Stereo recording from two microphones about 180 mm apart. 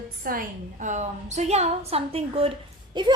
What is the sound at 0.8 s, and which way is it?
A woman's voice, 40° right (ahead or behind).